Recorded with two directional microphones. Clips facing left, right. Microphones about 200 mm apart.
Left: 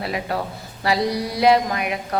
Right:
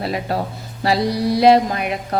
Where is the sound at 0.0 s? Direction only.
35° right (ahead or behind).